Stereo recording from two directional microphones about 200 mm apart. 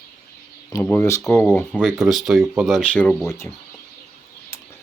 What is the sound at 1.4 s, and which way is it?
Speech, 15° left (ahead or behind).